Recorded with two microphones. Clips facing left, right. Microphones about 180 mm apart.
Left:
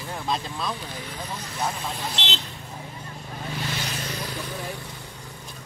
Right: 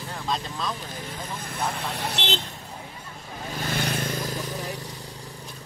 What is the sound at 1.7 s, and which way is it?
Speech, 60° right (ahead or behind).